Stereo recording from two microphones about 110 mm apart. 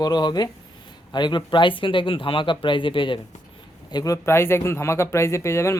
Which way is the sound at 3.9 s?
30° left (ahead or behind).